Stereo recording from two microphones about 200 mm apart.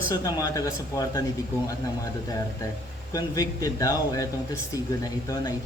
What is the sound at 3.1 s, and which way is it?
Speech, 20° left (ahead or behind).